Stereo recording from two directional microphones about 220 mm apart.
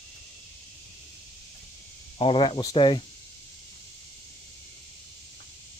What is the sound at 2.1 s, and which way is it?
Speech, 25° left (ahead or behind).